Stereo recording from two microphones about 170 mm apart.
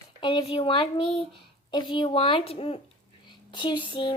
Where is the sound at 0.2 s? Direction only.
25° left (ahead or behind).